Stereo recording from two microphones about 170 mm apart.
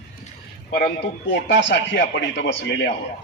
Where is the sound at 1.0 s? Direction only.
90° left.